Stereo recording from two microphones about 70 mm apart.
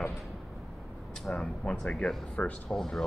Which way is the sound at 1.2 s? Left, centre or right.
Centre.